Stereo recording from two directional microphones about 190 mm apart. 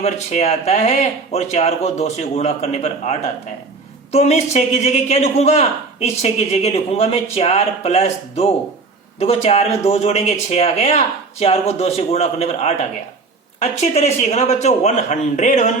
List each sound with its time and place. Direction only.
0.0 s a man's voice: 35° left (ahead or behind)